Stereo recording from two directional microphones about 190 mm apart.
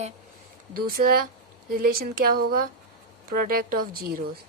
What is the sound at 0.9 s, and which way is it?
A woman's voice, 50° right (ahead or behind).